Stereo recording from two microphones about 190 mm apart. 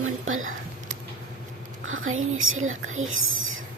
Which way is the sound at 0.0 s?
90° right.